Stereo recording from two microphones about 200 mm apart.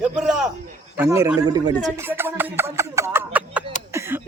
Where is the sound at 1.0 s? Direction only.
15° right (ahead or behind).